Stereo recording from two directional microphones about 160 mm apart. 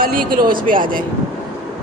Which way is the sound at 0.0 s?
65° right (ahead or behind).